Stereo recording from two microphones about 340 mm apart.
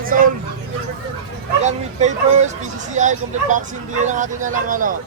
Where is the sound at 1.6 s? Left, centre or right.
Centre.